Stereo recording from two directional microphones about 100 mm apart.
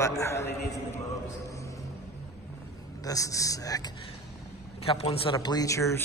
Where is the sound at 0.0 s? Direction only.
30° left (ahead or behind).